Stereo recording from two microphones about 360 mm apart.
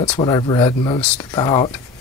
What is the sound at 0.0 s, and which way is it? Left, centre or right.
Speech, centre.